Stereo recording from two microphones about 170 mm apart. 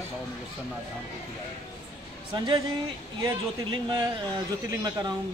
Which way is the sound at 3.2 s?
25° right (ahead or behind).